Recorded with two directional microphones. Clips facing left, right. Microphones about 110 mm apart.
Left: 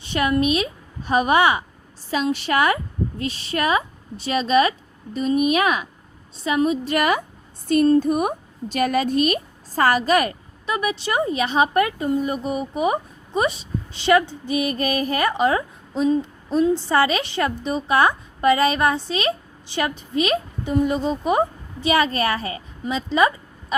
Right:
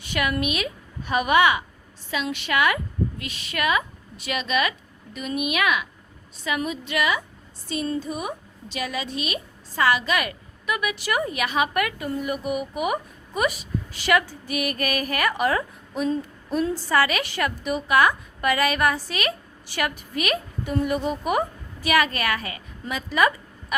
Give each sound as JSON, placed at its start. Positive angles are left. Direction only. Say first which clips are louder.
{"t": 0.0, "sound": "a woman's voice", "louder": "left 5 dB", "side_deg": 30}